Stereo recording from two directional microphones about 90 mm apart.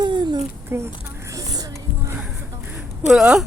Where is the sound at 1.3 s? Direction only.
45° right (ahead or behind).